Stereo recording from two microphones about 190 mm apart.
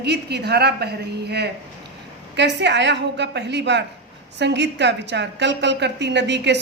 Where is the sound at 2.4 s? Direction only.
65° right (ahead or behind).